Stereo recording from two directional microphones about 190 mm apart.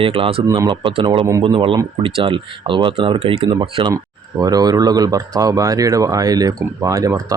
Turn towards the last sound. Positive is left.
turn(degrees=-20)  # may be behind; listen again after turning